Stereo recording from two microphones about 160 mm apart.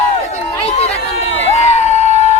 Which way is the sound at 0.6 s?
40° left (ahead or behind).